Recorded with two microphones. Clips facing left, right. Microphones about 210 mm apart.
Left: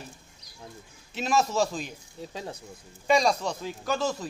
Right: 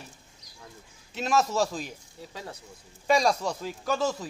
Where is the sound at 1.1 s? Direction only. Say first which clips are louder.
Even; centre (ahead or behind).